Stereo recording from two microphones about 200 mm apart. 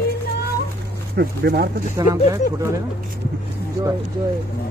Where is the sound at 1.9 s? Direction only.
20° right (ahead or behind).